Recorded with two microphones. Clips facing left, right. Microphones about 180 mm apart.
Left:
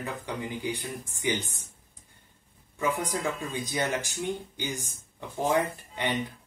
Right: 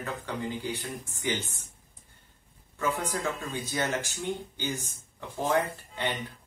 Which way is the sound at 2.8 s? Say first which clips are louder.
Left 1 dB; 15° left (ahead or behind).